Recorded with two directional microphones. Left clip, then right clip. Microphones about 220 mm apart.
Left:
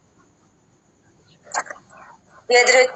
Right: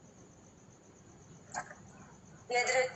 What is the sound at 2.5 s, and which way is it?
Speech, 45° left (ahead or behind).